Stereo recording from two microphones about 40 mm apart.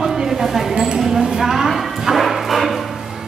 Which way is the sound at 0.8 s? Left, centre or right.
Centre.